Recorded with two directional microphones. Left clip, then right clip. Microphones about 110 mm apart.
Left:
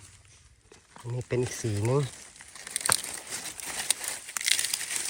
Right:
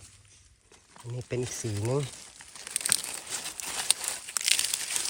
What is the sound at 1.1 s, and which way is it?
Speech, 20° right (ahead or behind).